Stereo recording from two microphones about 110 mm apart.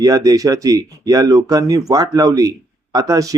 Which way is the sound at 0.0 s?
35° right (ahead or behind).